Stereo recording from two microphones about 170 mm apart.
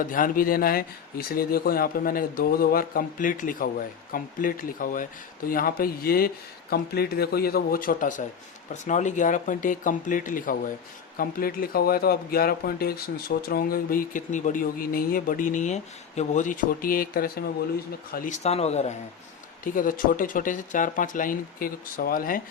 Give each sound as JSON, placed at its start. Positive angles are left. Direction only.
{"t": 0.1, "sound": "speech", "side_deg": 55}
{"t": 19.6, "sound": "speech", "side_deg": 50}